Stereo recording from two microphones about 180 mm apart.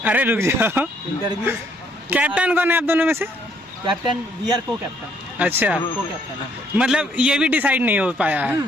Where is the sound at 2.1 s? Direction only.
10° right (ahead or behind).